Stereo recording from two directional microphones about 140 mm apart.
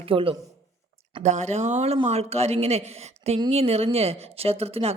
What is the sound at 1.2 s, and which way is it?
A woman's voice, 55° right (ahead or behind).